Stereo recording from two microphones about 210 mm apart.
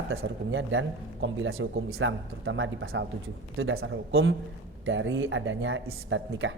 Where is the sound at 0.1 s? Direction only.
65° right (ahead or behind).